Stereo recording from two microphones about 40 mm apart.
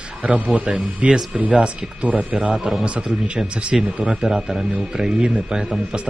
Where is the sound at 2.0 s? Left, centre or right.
Right.